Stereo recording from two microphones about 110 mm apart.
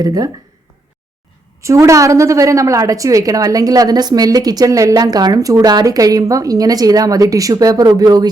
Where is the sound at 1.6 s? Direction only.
30° right (ahead or behind).